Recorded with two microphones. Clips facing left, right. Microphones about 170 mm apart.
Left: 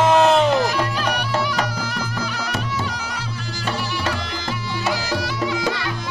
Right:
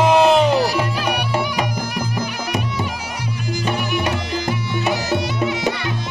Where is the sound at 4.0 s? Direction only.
20° right (ahead or behind).